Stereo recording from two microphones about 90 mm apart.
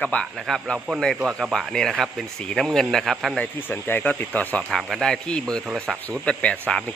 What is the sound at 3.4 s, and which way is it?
Speech, 20° left (ahead or behind).